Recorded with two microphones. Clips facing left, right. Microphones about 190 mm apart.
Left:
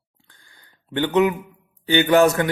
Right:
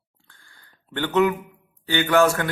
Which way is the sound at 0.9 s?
15° left (ahead or behind).